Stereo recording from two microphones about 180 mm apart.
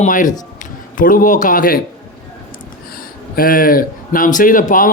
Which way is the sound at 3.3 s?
50° left (ahead or behind).